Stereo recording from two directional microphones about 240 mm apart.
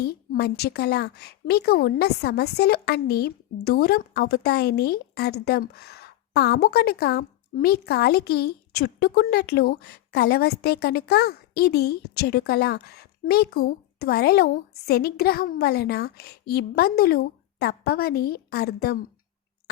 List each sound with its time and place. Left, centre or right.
0.0 s a woman's voice: left